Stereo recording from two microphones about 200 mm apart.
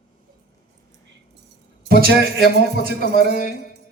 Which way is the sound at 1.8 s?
50° right (ahead or behind).